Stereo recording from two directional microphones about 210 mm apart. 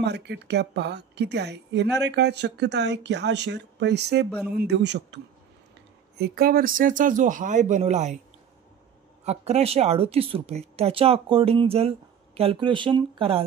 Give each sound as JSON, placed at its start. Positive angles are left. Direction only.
{"t": 0.0, "sound": "a woman's voice", "side_deg": -55}
{"t": 4.3, "sound": "speech", "side_deg": 0}
{"t": 4.6, "sound": "a woman's voice", "side_deg": -50}
{"t": 9.2, "sound": "speech", "side_deg": -30}